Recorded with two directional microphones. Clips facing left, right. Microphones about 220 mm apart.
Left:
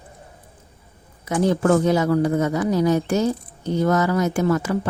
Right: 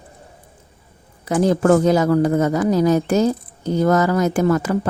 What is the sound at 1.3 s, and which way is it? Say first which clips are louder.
A woman's voice: right 3 dB; 45° right (ahead or behind).